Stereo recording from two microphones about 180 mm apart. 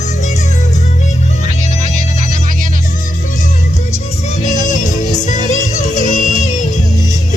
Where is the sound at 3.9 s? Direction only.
40° left (ahead or behind).